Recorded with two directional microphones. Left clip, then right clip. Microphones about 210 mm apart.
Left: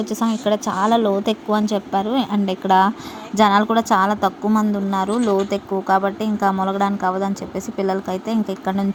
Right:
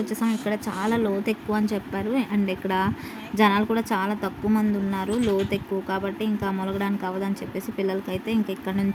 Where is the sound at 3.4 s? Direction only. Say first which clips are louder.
Left 6 dB; 20° left (ahead or behind).